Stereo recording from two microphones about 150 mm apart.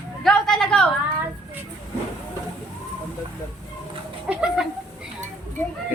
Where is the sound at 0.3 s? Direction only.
5° left (ahead or behind).